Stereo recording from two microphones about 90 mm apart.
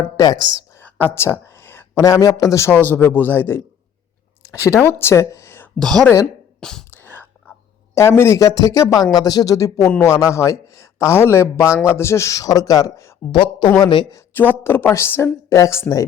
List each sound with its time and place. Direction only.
0.8 s a sound: 20° left (ahead or behind)
2.0 s speech: 40° left (ahead or behind)
2.7 s speech: 20° left (ahead or behind)
5.8 s a woman's voice: 5° left (ahead or behind)
6.9 s whispering: 20° left (ahead or behind)
7.9 s a man's voice: 30° left (ahead or behind)
13.3 s speech: 70° left (ahead or behind)
13.7 s speech: 55° left (ahead or behind)
14.3 s speech: 20° left (ahead or behind)